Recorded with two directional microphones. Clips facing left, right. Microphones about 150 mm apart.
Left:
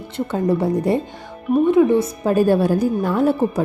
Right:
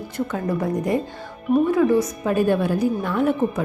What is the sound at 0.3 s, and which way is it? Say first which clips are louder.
Speech: left 7 dB; 30° left (ahead or behind).